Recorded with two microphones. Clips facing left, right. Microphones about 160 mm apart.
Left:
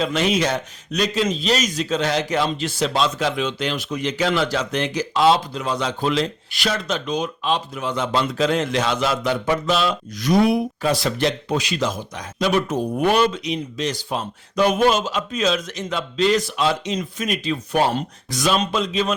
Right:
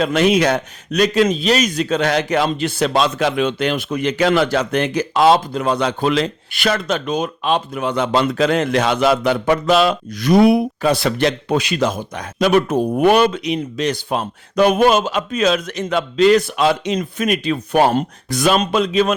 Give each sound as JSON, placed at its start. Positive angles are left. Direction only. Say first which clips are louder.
{"t": 0.0, "sound": "a man's voice", "louder": "right 5 dB", "side_deg": -60}